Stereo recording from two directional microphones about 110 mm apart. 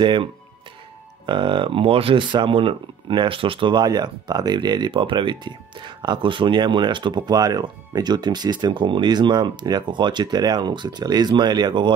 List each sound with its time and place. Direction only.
0.0 s speech: 50° right (ahead or behind)